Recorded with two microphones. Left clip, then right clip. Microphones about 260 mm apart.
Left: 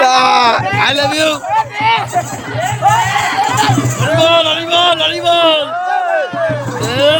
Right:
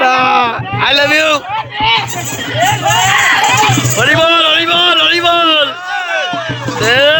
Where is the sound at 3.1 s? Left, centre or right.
Centre.